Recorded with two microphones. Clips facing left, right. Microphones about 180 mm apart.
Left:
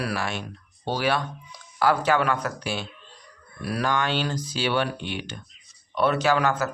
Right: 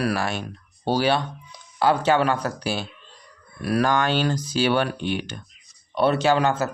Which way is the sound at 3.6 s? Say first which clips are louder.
Right 4 dB; 50° right (ahead or behind).